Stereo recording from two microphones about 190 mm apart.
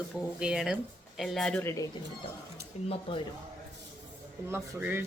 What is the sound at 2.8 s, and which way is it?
Speech, 35° left (ahead or behind).